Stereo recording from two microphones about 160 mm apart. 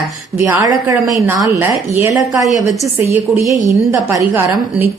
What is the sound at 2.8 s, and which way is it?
A woman's voice, 15° right (ahead or behind).